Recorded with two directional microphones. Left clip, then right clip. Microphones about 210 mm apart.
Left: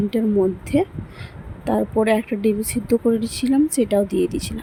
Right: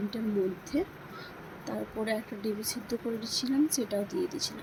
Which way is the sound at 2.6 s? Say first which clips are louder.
Left 15 dB; 70° left (ahead or behind).